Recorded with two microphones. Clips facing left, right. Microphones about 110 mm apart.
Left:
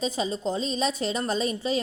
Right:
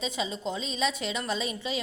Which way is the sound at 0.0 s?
40° left (ahead or behind).